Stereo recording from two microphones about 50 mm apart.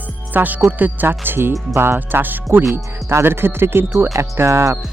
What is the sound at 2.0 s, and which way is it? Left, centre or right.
Speech, right.